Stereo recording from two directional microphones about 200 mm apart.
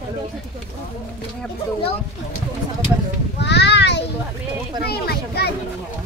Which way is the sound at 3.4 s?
55° left (ahead or behind).